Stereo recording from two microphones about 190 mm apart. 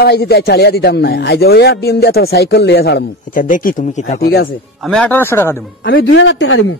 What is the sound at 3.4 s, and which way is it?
Speech, 45° left (ahead or behind).